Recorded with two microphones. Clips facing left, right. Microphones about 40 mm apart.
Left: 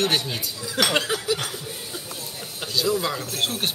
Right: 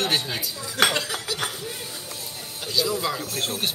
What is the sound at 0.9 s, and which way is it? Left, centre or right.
Laughter, left.